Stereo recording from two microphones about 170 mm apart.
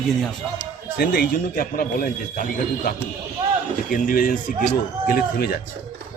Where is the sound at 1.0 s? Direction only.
60° left (ahead or behind).